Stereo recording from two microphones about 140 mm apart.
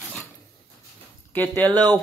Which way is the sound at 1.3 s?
10° left (ahead or behind).